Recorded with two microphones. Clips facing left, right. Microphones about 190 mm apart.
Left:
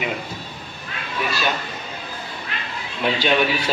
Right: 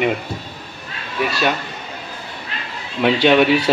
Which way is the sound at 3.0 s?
70° right (ahead or behind).